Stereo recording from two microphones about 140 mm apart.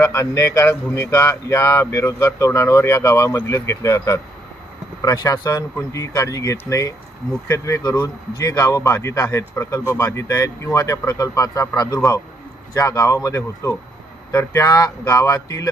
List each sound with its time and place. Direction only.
0.0 s speech: 20° left (ahead or behind)
12.7 s speech: 20° left (ahead or behind)